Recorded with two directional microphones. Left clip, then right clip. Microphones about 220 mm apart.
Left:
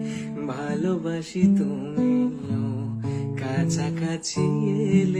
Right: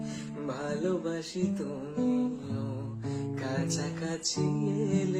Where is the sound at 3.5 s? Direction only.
45° left (ahead or behind).